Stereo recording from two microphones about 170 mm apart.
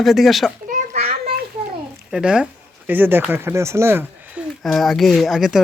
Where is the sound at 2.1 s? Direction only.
5° right (ahead or behind).